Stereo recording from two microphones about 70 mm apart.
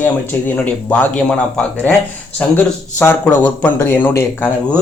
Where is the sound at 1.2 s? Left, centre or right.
Centre.